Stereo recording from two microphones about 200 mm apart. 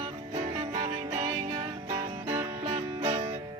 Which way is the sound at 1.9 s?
10° right (ahead or behind).